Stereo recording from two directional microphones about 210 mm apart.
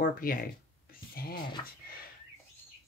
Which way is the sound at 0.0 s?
45° left (ahead or behind).